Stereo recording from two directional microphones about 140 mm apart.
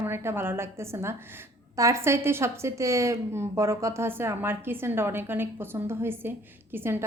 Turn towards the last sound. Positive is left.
turn(degrees=-15)  # may be behind; listen again after turning